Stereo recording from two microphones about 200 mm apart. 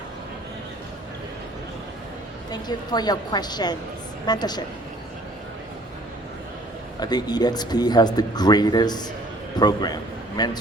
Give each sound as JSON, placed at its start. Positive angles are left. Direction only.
{"t": 2.5, "sound": "speech", "side_deg": 20}
{"t": 7.0, "sound": "a man's voice", "side_deg": 20}